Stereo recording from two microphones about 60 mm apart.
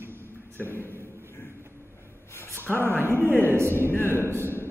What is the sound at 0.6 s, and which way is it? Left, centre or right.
Speech, left.